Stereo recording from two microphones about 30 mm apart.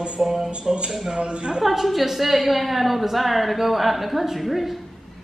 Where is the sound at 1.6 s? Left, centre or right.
Centre.